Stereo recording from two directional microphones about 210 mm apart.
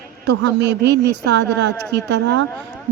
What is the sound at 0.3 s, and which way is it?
A woman's voice, 55° right (ahead or behind).